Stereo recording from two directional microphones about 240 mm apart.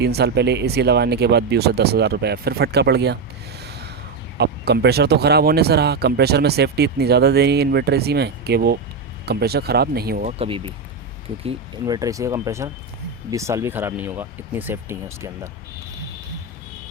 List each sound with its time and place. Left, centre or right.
0.0 s speech: right
4.4 s speech: right
10.3 s speech: right